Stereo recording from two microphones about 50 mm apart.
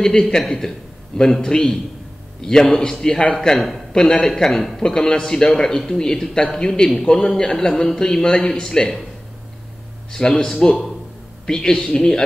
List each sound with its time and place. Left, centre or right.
0.0 s a man's voice: centre
3.5 s a man's voice: centre
3.9 s a man's voice: centre
4.3 s a man's voice: centre
10.1 s a man's voice: centre